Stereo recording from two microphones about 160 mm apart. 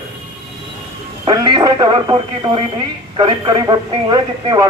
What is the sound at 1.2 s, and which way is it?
Speech, 25° right (ahead or behind).